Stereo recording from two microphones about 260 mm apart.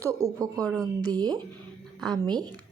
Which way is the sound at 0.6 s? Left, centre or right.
Centre.